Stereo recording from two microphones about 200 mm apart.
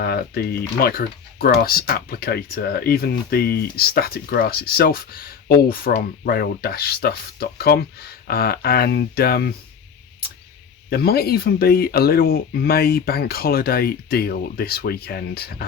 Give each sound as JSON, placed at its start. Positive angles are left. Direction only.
{"t": 0.0, "sound": "speech", "side_deg": 50}
{"t": 10.8, "sound": "speech", "side_deg": 50}